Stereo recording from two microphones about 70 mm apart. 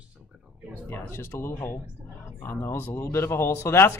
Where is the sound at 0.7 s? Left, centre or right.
Left.